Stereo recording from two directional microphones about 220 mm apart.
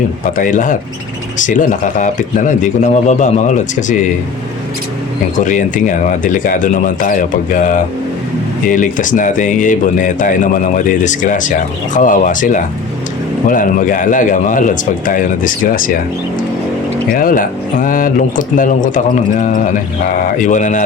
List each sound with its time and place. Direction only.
0.3 s speech: 35° left (ahead or behind)
5.4 s speech: 35° left (ahead or behind)
17.2 s speech: 40° left (ahead or behind)